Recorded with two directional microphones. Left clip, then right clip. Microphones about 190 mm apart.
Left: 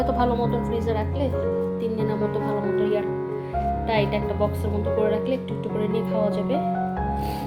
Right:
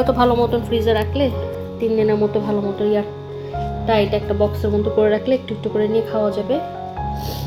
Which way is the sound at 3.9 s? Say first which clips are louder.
Right 9 dB; 35° right (ahead or behind).